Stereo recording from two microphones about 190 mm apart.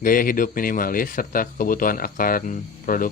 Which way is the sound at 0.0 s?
45° left (ahead or behind).